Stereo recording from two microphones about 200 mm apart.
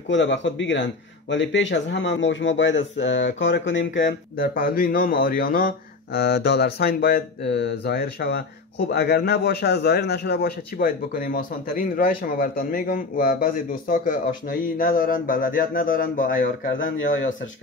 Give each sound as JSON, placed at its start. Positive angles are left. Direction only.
{"t": 0.1, "sound": "a man's voice", "side_deg": 65}
{"t": 4.4, "sound": "a man's voice", "side_deg": 45}
{"t": 16.7, "sound": "a man's voice", "side_deg": 70}